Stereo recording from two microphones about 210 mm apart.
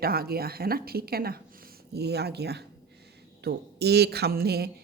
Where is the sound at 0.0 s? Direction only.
45° right (ahead or behind).